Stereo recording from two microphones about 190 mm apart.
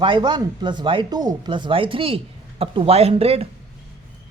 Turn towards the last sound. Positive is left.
turn(degrees=-30)  # may be behind; listen again after turning